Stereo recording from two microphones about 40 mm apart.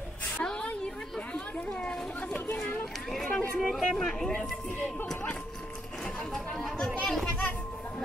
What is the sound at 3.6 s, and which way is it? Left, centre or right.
Speech, centre.